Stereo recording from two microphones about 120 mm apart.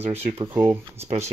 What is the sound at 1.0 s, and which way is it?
Speech, 65° right (ahead or behind).